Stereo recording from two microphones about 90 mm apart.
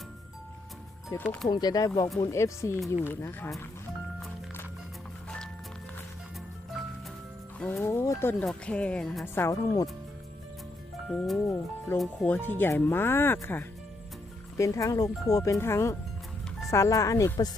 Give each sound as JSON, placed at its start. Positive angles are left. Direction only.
{"t": 1.1, "sound": "speech", "side_deg": 35}
{"t": 1.5, "sound": "speech", "side_deg": 50}
{"t": 2.3, "sound": "speech", "side_deg": 30}
{"t": 7.7, "sound": "speech", "side_deg": 25}
{"t": 8.4, "sound": "speech", "side_deg": 10}
{"t": 9.2, "sound": "speech", "side_deg": 25}
{"t": 9.5, "sound": "speech", "side_deg": 40}
{"t": 11.1, "sound": "speech", "side_deg": 10}
{"t": 11.4, "sound": "speech", "side_deg": 25}
{"t": 14.6, "sound": "speech", "side_deg": 35}